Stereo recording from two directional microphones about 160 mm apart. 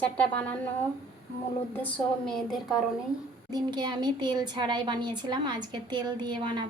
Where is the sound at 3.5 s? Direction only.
25° right (ahead or behind).